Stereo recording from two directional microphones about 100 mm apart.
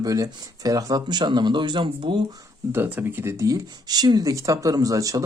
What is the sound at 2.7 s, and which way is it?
Speech, 20° right (ahead or behind).